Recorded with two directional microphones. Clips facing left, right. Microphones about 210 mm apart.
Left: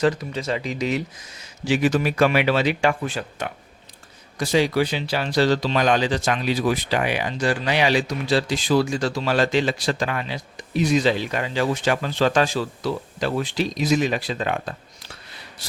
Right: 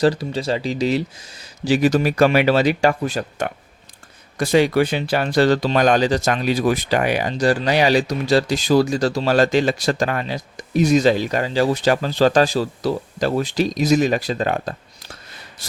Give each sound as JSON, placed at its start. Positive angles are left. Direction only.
{"t": 0.0, "sound": "speech", "side_deg": -35}
{"t": 4.4, "sound": "speech", "side_deg": -55}